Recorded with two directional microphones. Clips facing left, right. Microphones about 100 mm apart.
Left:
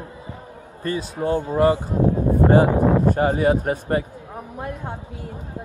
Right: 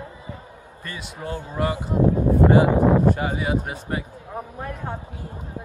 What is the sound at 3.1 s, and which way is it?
Speech, 45° left (ahead or behind).